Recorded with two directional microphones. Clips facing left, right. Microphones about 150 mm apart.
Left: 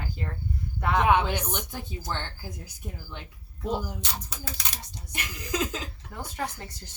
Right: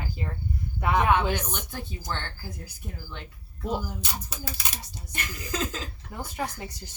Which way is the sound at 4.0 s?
5° right (ahead or behind).